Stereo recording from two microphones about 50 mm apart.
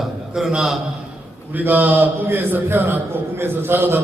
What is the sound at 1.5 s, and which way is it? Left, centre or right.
A man's voice, right.